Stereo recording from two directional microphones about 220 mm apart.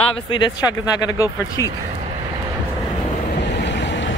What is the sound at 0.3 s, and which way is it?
Speech, 20° left (ahead or behind).